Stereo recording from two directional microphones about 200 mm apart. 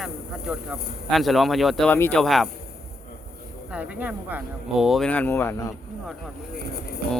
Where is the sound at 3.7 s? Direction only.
5° right (ahead or behind); by 5.7 s 10° left (ahead or behind).